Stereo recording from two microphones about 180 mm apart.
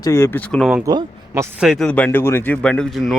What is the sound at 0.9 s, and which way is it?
Speech, 20° right (ahead or behind).